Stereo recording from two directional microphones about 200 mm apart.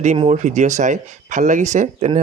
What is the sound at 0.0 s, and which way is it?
Speech, 35° right (ahead or behind).